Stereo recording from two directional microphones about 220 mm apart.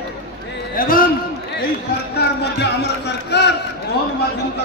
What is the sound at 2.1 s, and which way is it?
Speech, 50° left (ahead or behind).